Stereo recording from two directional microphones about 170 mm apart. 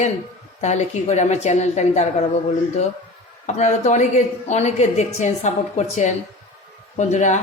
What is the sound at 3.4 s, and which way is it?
A woman's voice, 45° left (ahead or behind).